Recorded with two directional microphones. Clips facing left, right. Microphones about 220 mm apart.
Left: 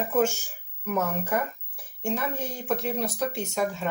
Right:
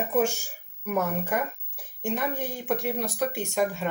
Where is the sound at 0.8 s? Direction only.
15° right (ahead or behind).